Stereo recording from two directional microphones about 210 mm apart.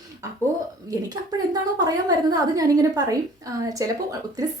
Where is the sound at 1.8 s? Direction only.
15° right (ahead or behind).